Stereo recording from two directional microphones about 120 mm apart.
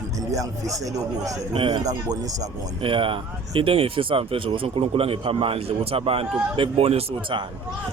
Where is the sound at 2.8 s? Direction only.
45° right (ahead or behind).